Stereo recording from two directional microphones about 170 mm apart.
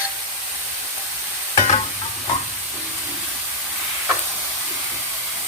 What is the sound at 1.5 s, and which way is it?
Stir, 40° left (ahead or behind).